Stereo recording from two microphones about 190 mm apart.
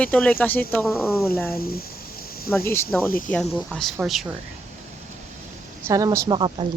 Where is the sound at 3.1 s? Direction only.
45° left (ahead or behind).